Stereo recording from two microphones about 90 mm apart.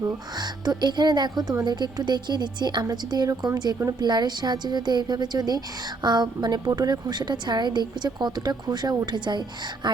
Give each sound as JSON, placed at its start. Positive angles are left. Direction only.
{"t": 0.0, "sound": "a woman's voice", "side_deg": -50}